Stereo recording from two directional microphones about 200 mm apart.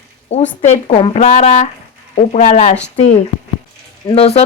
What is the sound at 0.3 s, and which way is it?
Speech, 35° left (ahead or behind).